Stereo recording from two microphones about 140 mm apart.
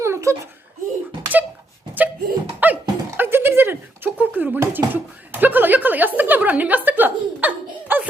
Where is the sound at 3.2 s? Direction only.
15° right (ahead or behind).